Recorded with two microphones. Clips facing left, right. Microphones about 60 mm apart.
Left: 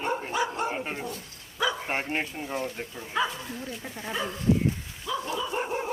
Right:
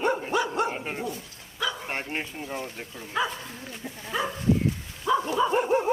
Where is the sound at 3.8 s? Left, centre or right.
Left.